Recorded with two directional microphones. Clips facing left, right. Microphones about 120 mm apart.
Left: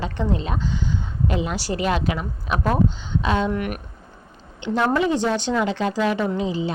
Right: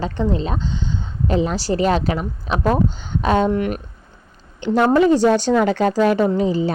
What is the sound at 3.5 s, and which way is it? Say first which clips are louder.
Speech: right 5 dB; 30° right (ahead or behind).